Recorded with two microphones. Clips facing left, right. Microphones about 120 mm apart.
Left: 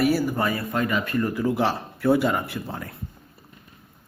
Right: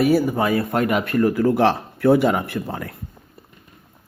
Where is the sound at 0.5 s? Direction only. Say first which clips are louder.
Right 5 dB; 65° right (ahead or behind).